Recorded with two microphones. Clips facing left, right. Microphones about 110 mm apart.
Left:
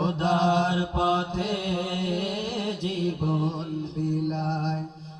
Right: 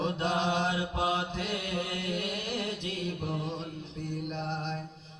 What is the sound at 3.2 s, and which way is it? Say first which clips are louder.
Music: left 8 dB; 30° left (ahead or behind).